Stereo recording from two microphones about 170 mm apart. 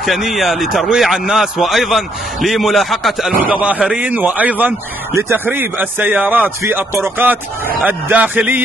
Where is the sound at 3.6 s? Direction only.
10° right (ahead or behind).